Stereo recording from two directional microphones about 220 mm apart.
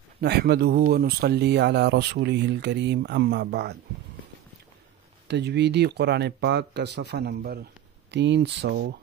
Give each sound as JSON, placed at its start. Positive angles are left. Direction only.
{"t": 0.2, "sound": "speech", "side_deg": -50}
{"t": 5.3, "sound": "speech", "side_deg": -50}